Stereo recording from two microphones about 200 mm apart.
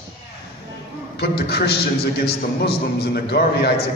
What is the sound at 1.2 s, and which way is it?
Speech, 55° left (ahead or behind).